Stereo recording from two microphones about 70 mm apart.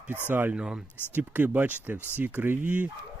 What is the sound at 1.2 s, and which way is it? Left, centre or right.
Speech, right.